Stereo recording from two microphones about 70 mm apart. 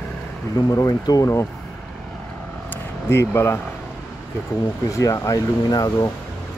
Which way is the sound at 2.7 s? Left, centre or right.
Left.